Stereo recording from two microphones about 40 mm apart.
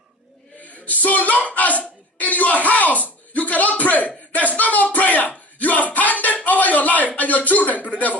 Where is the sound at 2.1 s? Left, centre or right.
Left.